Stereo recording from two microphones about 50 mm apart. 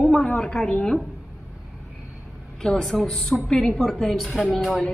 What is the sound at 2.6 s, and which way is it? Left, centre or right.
A woman's voice, centre.